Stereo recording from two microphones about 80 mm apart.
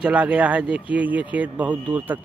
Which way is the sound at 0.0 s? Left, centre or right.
Centre.